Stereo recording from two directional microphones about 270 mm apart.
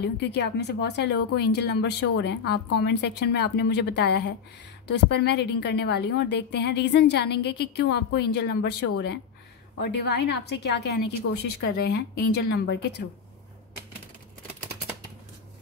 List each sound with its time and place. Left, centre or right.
0.0 s a woman's voice: left
9.8 s a woman's voice: left